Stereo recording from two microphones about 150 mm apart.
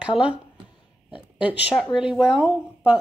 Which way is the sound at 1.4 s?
10° right (ahead or behind).